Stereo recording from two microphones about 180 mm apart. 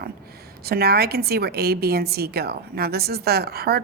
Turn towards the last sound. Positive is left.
turn(degrees=-60)  # may be behind; listen again after turning